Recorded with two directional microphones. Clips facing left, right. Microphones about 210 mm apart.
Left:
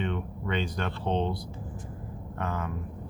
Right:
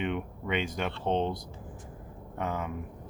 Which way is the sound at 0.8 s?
15° right (ahead or behind).